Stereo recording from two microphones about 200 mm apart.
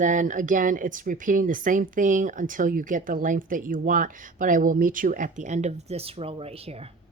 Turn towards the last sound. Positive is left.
turn(degrees=-30)  # may be behind; listen again after turning